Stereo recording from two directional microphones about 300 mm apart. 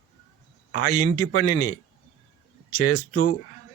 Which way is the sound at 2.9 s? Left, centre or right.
Left.